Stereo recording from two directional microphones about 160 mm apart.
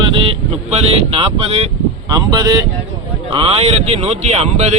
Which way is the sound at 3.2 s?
35° right (ahead or behind).